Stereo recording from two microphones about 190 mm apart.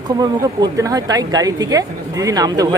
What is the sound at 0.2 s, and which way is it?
A woman's voice, 20° right (ahead or behind).